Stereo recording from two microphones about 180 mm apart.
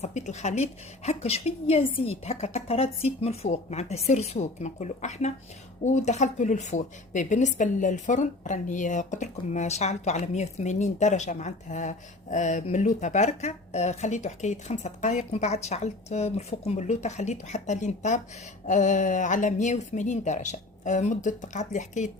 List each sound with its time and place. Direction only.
0.0 s speech: 40° left (ahead or behind)